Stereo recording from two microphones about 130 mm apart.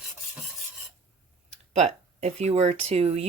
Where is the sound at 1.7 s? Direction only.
55° right (ahead or behind).